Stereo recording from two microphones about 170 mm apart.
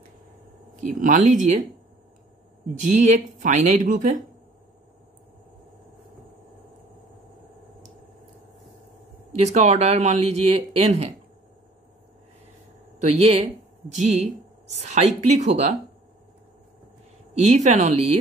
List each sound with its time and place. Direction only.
0.8 s speech: 50° right (ahead or behind)
2.8 s speech: 45° right (ahead or behind)
9.3 s speech: 40° right (ahead or behind)
13.0 s speech: 40° right (ahead or behind)
17.3 s a sound: 40° right (ahead or behind)
17.6 s speech: 40° right (ahead or behind)